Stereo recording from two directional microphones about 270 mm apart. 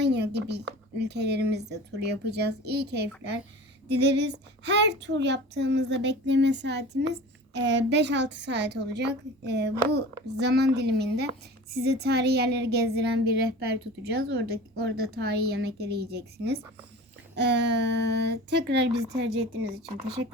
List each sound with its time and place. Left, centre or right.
0.0 s a woman's voice: right